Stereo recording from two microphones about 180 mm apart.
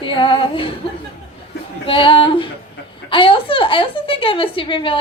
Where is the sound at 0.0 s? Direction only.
30° left (ahead or behind).